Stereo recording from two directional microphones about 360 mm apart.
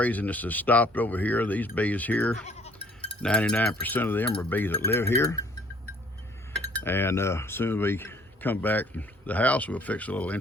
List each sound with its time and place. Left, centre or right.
0.0 s speech: centre
2.5 s sheep: centre
3.2 s speech: centre
6.7 s speech: centre